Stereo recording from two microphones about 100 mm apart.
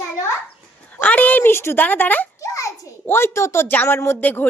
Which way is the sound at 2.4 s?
35° left (ahead or behind).